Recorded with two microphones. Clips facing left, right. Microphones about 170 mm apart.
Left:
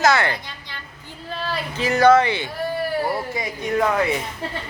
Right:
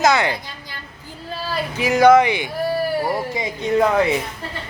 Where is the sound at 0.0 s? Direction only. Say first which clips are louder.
Right 1 dB; 15° right (ahead or behind).